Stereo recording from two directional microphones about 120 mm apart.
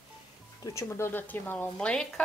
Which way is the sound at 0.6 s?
25° left (ahead or behind).